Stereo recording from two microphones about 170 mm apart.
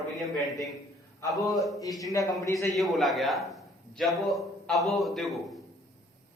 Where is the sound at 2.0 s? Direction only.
20° left (ahead or behind).